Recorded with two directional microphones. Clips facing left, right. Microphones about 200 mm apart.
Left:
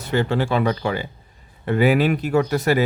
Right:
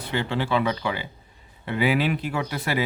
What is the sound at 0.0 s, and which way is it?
Speech, 45° left (ahead or behind).